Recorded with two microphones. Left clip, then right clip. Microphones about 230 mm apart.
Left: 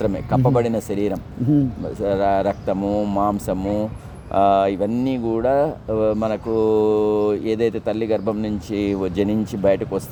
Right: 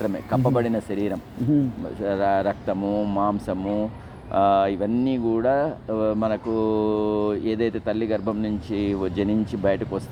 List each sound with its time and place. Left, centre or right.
0.0 s speech: left